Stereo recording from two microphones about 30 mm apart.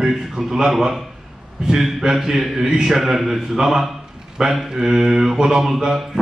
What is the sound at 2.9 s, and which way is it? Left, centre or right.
A man's voice, centre.